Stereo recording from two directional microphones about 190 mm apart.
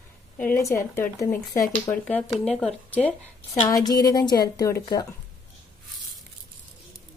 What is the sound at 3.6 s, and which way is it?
A woman's voice, 20° left (ahead or behind).